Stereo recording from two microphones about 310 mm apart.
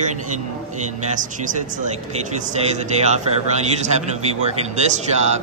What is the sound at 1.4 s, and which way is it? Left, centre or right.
Speech, right.